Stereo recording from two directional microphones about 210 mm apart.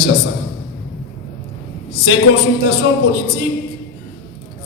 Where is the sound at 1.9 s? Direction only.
50° left (ahead or behind).